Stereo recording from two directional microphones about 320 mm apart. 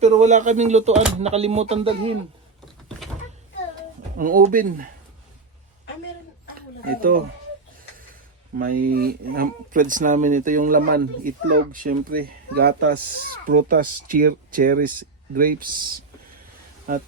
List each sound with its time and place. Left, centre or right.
0.0 s speech: right
4.2 s speech: right
6.5 s a sound: right
8.5 s speech: right